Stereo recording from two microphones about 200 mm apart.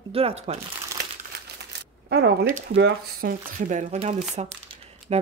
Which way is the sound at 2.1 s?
55° right (ahead or behind).